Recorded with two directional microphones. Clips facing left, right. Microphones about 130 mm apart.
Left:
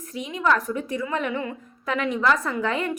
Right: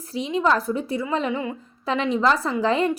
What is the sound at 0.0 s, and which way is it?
A woman's voice, 30° right (ahead or behind).